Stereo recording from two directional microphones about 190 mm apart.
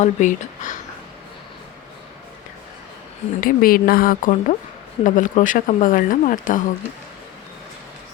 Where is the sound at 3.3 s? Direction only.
50° left (ahead or behind).